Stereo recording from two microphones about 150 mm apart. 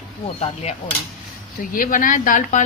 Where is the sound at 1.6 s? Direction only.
65° left (ahead or behind).